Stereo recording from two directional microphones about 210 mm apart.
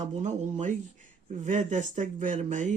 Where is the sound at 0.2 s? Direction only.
35° right (ahead or behind).